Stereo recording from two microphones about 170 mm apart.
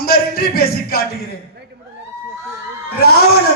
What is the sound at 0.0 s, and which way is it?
Speech, 65° left (ahead or behind).